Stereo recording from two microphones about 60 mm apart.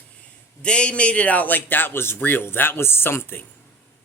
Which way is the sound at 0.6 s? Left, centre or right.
Centre.